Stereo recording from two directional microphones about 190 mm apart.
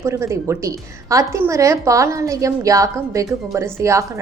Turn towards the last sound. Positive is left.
turn(degrees=-15)  # may be behind; listen again after turning